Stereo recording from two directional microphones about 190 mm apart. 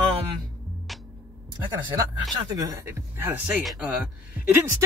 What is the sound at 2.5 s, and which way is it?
Speech, 20° right (ahead or behind).